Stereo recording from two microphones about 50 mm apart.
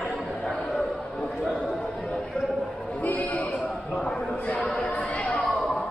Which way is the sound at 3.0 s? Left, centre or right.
Left.